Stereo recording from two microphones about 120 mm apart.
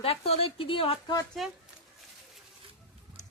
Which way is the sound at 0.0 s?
55° left (ahead or behind).